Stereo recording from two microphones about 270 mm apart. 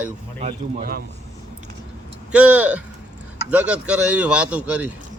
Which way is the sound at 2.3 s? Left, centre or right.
Centre.